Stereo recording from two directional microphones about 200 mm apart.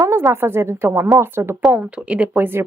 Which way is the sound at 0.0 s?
15° right (ahead or behind).